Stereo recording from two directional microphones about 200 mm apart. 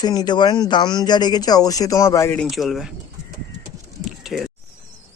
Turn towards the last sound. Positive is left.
turn(degrees=0)  # may be behind; listen again after turning